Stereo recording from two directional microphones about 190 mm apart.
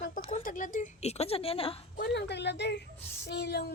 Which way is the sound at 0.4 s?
40° left (ahead or behind).